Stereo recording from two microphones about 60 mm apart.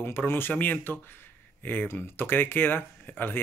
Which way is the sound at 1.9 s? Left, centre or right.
Left.